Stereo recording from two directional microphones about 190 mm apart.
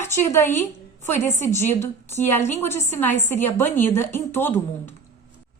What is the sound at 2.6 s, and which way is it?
Speech, 10° left (ahead or behind).